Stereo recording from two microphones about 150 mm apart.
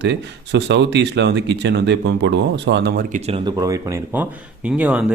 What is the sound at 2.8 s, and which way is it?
Speech, 80° right.